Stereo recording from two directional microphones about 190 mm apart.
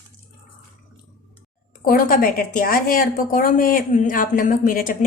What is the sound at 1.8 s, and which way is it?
A woman's voice, 50° left (ahead or behind).